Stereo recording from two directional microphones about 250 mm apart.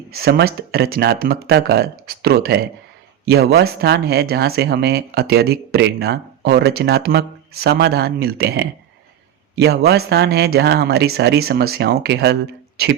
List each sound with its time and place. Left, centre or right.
0.1 s speech: right